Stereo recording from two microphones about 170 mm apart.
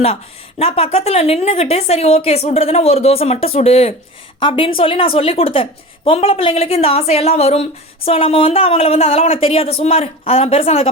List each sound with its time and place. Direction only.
0.6 s a woman's voice: 35° left (ahead or behind)